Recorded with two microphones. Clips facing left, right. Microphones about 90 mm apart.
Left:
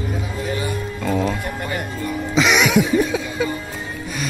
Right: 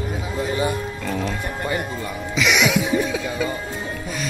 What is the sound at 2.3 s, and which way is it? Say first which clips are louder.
Music: left 2 dB; 35° left (ahead or behind).